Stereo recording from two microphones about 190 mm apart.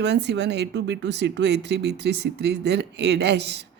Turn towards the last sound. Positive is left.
turn(degrees=-65)  # may be behind; listen again after turning